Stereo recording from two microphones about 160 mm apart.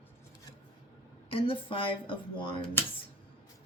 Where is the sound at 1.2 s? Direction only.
35° left (ahead or behind).